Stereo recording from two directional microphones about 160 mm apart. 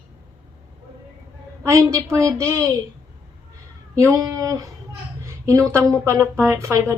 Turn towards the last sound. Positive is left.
turn(degrees=-15)  # may be behind; listen again after turning